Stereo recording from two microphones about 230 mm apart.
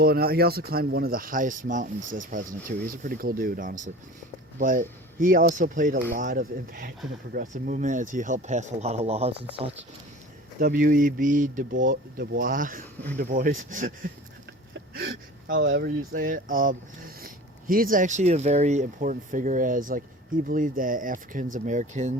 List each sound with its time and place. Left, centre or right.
0.0 s speech: right
10.6 s speech: right
14.7 s a sound: right
15.6 s speech: right
16.1 s speech: right